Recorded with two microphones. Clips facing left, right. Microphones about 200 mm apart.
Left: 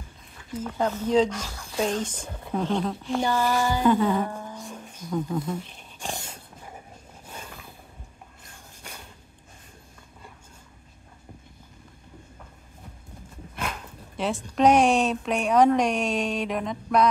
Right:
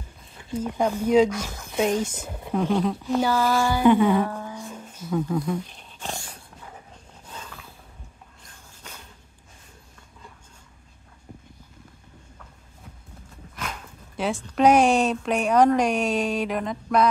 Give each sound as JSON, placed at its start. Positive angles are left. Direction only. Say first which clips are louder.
{"t": 0.6, "sound": "speech", "louder": "right 3 dB", "side_deg": -15}
{"t": 2.0, "sound": "speech", "louder": "right 3 dB", "side_deg": -10}
{"t": 3.3, "sound": "a sound", "louder": "even", "side_deg": 15}
{"t": 3.7, "sound": "speech", "louder": "right 5 dB", "side_deg": -15}
{"t": 4.2, "sound": "speech", "louder": "right 3 dB", "side_deg": 15}
{"t": 4.5, "sound": "a sound", "louder": "right 2 dB", "side_deg": -5}
{"t": 5.5, "sound": "dog", "louder": "right 4 dB", "side_deg": 15}
{"t": 7.2, "sound": "mechanisms", "louder": "even", "side_deg": 10}
{"t": 14.1, "sound": "a woman's voice", "louder": "right 1 dB", "side_deg": 0}